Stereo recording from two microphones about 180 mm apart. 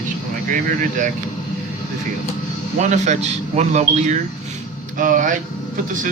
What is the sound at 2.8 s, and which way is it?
Speech, 40° right (ahead or behind).